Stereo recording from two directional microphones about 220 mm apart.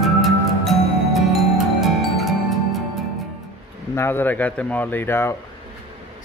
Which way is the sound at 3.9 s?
10° left (ahead or behind).